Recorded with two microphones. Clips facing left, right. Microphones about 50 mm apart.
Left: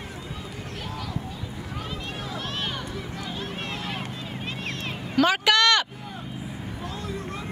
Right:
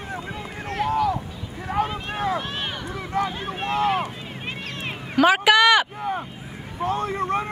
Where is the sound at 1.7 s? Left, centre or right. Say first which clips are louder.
Right 12 dB; right.